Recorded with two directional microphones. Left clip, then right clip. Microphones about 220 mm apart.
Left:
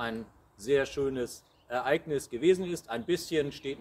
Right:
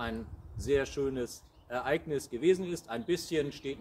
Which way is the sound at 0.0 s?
15° left (ahead or behind).